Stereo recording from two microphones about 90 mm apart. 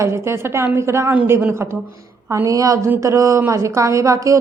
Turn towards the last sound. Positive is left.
turn(degrees=-35)  # may be behind; listen again after turning